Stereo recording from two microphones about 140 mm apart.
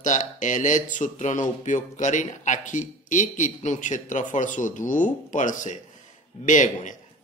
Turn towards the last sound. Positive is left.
turn(degrees=60)  # may be behind; listen again after turning